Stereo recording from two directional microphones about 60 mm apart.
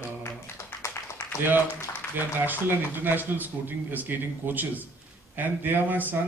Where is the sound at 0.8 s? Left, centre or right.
Left.